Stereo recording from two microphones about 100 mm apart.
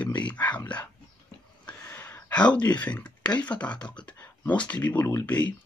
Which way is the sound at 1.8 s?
20° left (ahead or behind).